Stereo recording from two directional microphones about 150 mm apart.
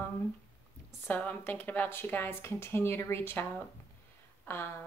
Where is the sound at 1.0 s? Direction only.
10° left (ahead or behind).